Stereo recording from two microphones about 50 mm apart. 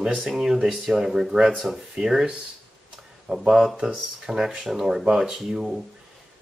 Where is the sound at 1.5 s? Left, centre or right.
Centre.